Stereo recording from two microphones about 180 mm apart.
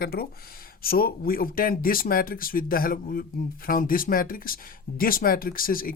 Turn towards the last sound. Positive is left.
turn(degrees=50)  # may be behind; listen again after turning